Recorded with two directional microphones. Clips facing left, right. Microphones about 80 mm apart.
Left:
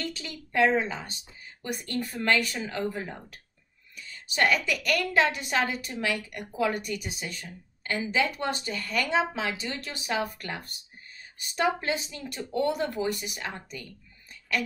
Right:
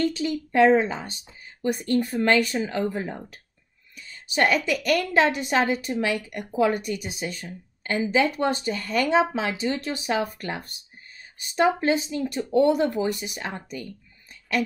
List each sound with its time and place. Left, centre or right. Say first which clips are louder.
0.0 s speech: right 12 dB; right